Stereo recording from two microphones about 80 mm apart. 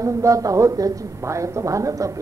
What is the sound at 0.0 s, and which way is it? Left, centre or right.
Speech, right.